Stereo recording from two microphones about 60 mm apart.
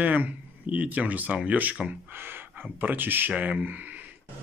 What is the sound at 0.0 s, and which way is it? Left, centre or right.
Speech, right.